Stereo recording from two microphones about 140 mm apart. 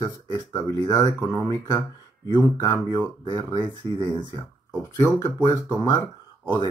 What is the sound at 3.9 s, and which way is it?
Speech, 25° left (ahead or behind).